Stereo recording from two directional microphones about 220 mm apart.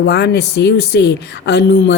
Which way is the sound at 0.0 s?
50° left (ahead or behind).